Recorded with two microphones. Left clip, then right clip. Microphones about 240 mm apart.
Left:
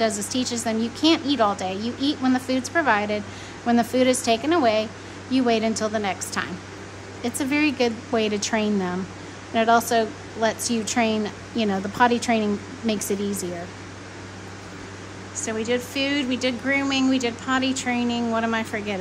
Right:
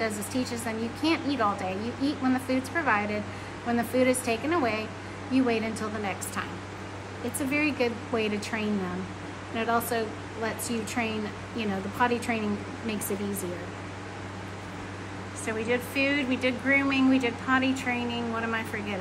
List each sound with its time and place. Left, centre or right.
0.0 s speech: left
7.5 s speech: left
15.4 s speech: centre